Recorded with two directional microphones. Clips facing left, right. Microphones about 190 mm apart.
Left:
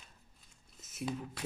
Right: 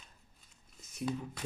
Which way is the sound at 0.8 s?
5° left (ahead or behind).